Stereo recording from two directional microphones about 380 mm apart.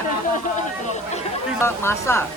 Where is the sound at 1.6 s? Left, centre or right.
Centre.